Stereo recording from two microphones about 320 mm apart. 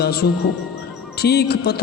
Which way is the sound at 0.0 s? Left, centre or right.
Left.